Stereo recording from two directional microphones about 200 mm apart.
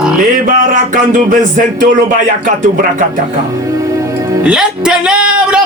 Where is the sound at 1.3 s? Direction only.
40° right (ahead or behind).